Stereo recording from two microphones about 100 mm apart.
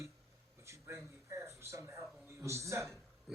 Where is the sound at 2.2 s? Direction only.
30° right (ahead or behind).